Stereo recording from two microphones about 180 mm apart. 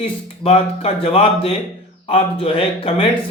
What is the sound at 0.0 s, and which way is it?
A man's voice, 30° left (ahead or behind).